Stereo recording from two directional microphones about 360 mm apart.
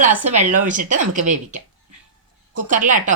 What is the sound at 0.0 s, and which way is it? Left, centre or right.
Speech, right.